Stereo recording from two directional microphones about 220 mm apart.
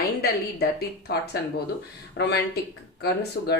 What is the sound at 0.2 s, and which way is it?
Speech, 45° left (ahead or behind).